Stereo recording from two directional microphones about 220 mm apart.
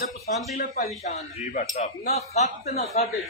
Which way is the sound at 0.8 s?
30° left (ahead or behind).